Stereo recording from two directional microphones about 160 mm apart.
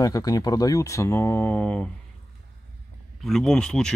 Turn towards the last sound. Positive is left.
turn(degrees=5)  # may be behind; listen again after turning